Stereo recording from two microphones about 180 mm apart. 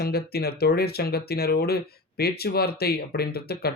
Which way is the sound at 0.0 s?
60° left (ahead or behind).